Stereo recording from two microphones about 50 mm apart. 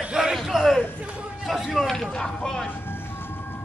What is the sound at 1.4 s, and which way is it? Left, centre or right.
Speech, centre.